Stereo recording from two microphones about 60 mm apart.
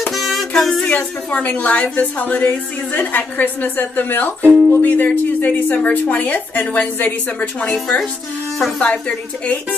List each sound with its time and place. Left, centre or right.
0.1 s music: centre
0.8 s a woman's voice: centre
7.7 s speech: centre